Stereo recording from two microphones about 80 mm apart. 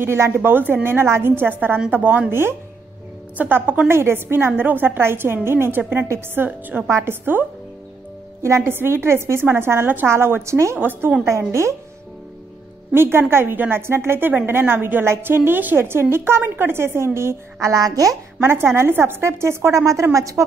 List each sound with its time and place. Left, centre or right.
0.0 s a woman's voice: right
8.4 s a woman's voice: right
10.8 s a woman's voice: right
11.2 s a woman's voice: right
12.9 s a woman's voice: right
18.4 s a woman's voice: right